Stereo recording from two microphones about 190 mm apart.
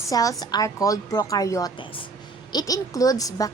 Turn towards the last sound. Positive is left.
turn(degrees=20)  # may be behind; listen again after turning